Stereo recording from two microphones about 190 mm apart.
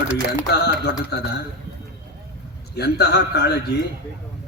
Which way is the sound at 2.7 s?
60° left (ahead or behind).